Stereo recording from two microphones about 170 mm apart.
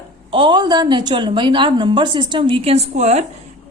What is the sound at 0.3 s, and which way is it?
A woman's voice, 30° right (ahead or behind).